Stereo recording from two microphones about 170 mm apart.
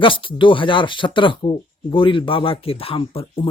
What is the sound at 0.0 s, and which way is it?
Speech, 30° left (ahead or behind).